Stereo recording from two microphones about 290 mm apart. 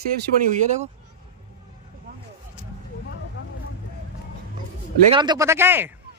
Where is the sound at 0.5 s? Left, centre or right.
Right.